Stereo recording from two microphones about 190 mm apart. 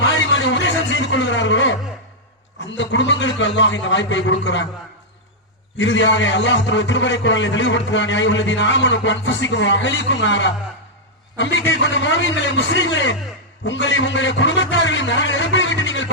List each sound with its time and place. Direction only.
0.0 s a sound: 75° left (ahead or behind)
2.6 s a man's voice: 75° left (ahead or behind)
5.7 s a man's voice: 75° left (ahead or behind)